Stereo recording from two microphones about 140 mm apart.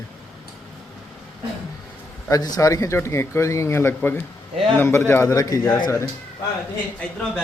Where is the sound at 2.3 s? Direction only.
25° left (ahead or behind).